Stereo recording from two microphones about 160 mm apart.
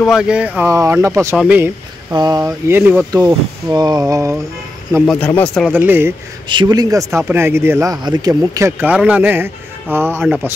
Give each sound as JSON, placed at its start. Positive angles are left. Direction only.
{"t": 0.0, "sound": "speech", "side_deg": -5}
{"t": 0.7, "sound": "speech", "side_deg": -20}
{"t": 1.3, "sound": "speech", "side_deg": -5}
{"t": 1.6, "sound": "speech", "side_deg": -20}
{"t": 2.7, "sound": "speech", "side_deg": -10}
{"t": 3.1, "sound": "speech", "side_deg": -20}
{"t": 5.0, "sound": "speech", "side_deg": 10}
{"t": 5.7, "sound": "speech", "side_deg": -10}
{"t": 6.5, "sound": "speech", "side_deg": -25}